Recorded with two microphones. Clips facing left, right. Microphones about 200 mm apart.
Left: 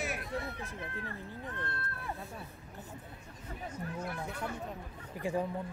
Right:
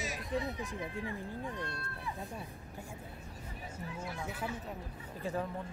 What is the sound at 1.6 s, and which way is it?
Speech, 55° left (ahead or behind).